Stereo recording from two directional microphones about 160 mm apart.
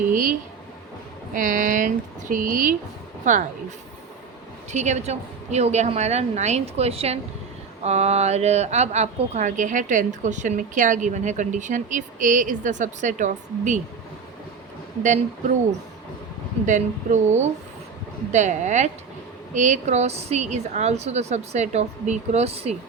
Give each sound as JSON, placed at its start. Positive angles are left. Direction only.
{"t": 0.1, "sound": "a woman's voice", "side_deg": -60}
{"t": 4.7, "sound": "a woman's voice", "side_deg": -45}
{"t": 15.0, "sound": "a woman's voice", "side_deg": -50}
{"t": 16.6, "sound": "a woman's voice", "side_deg": -50}